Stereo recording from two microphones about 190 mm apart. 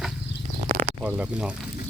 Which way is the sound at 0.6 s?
35° right (ahead or behind).